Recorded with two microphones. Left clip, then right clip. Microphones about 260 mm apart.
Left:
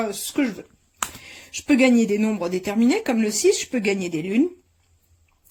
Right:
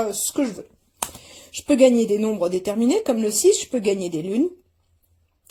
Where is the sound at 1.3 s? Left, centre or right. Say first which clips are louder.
Right 1 dB; centre.